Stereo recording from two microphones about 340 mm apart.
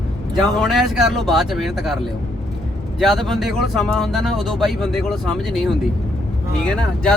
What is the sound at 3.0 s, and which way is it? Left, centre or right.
Speech, centre.